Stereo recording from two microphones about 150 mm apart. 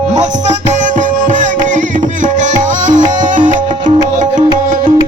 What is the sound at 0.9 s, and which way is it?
Music, 60° right (ahead or behind).